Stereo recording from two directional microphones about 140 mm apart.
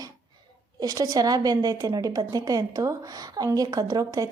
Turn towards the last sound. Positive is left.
turn(degrees=-25)  # may be behind; listen again after turning